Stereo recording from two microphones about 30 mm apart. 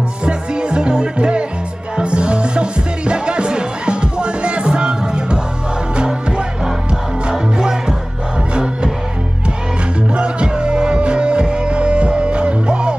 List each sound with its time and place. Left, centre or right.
0.2 s music: right
6.0 s music: right
10.1 s music: right